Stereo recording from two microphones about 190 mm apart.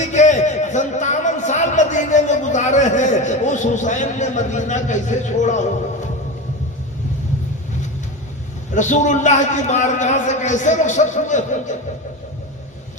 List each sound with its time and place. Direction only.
0.1 s a man's voice: 40° left (ahead or behind)
8.7 s a man's voice: 40° left (ahead or behind)